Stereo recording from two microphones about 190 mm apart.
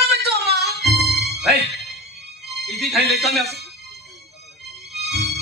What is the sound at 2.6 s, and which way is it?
Music, centre (ahead or behind).